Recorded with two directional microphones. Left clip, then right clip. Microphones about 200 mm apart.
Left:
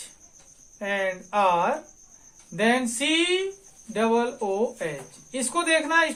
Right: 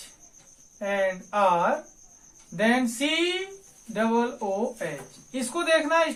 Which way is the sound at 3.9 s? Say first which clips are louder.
Left 2 dB; 35° left (ahead or behind).